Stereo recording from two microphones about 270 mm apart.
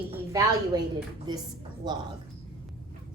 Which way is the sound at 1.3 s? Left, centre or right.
Centre.